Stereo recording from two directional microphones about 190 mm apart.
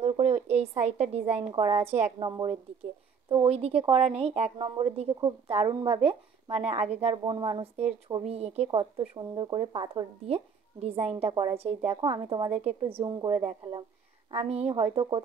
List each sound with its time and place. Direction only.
0.0 s a sound: 35° right (ahead or behind)
1.3 s speech: 30° right (ahead or behind)
14.3 s speech: 35° right (ahead or behind)